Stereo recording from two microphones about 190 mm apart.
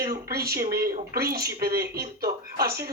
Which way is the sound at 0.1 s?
55° right (ahead or behind).